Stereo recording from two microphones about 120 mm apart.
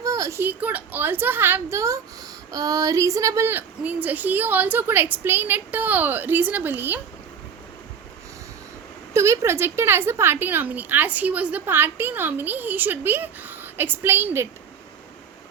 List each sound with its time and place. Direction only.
0.0 s a woman's voice: 30° right (ahead or behind)
9.1 s a woman's voice: 25° right (ahead or behind)